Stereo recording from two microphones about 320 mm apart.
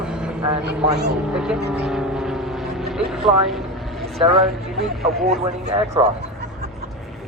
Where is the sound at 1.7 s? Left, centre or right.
Centre.